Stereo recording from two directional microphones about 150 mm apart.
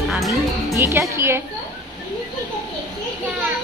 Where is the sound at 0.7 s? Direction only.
15° right (ahead or behind).